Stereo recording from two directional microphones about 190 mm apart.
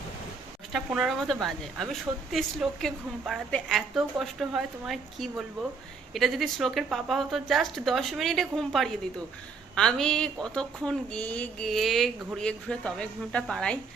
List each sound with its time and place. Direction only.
0.7 s a woman's voice: 5° right (ahead or behind)